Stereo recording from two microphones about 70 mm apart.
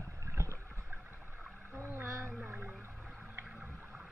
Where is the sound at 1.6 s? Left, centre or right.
Right.